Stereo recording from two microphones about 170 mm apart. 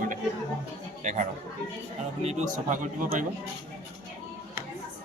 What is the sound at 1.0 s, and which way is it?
Speech, 45° right (ahead or behind).